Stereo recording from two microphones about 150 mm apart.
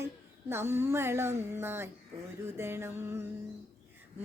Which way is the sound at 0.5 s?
15° right (ahead or behind).